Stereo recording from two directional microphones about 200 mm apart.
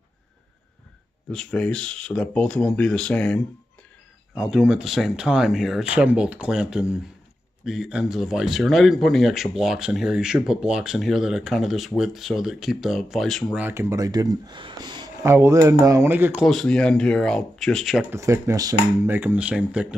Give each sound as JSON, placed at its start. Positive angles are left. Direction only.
{"t": 1.3, "sound": "speech", "side_deg": 5}
{"t": 4.4, "sound": "speech", "side_deg": -5}
{"t": 18.1, "sound": "speech", "side_deg": -15}